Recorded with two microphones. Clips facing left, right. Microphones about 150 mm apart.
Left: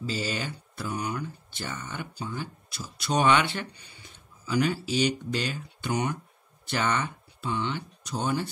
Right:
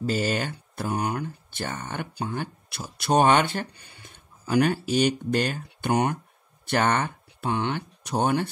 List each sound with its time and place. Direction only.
0.0 s speech: 55° right (ahead or behind)